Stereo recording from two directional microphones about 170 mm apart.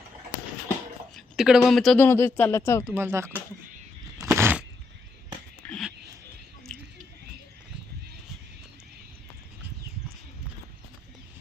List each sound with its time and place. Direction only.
1.1 s speech: centre (ahead or behind)
2.0 s speech: 15° left (ahead or behind)
2.9 s speech: 15° right (ahead or behind)
4.2 s a sound: 15° right (ahead or behind)
5.6 s a sound: 5° left (ahead or behind)
6.7 s chewing: 5° left (ahead or behind)